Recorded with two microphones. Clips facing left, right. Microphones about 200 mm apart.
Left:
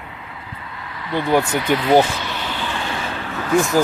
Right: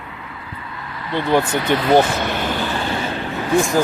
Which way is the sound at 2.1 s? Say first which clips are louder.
Right 6 dB; 50° right (ahead or behind).